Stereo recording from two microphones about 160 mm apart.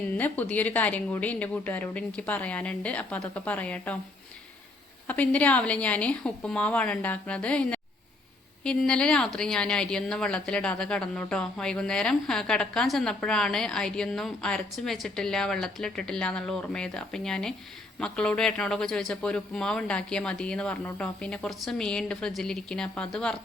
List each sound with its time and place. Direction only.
0.2 s speech: 10° left (ahead or behind)
5.0 s a woman's voice: 10° left (ahead or behind)